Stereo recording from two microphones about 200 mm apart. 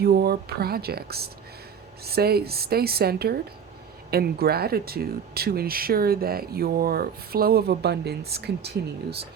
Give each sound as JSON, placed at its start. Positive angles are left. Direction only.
{"t": 0.0, "sound": "speech", "side_deg": -50}